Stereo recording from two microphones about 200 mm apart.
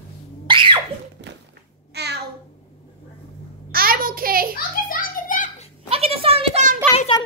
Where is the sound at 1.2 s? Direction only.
60° right (ahead or behind).